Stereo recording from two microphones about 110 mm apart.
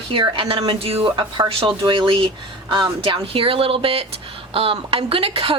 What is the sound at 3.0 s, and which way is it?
A woman's voice, 55° right (ahead or behind).